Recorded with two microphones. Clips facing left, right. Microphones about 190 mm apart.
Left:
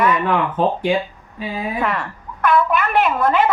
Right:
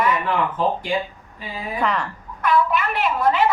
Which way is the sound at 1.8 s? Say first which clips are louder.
Right 1 dB; 5° left (ahead or behind).